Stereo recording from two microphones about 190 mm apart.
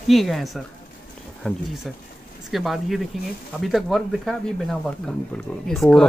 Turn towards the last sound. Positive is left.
turn(degrees=0)  # may be behind; listen again after turning